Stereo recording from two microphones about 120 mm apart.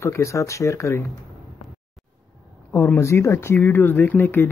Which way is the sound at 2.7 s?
25° left (ahead or behind).